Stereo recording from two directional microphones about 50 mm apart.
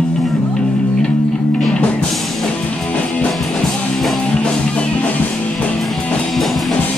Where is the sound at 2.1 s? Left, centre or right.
Centre.